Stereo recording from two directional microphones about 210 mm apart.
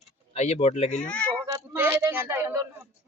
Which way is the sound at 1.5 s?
10° right (ahead or behind).